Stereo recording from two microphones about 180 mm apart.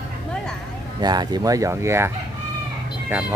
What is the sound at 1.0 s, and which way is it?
Speech, 25° right (ahead or behind).